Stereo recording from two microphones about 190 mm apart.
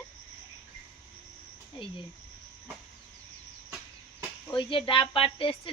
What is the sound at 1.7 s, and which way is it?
Speech, 25° left (ahead or behind).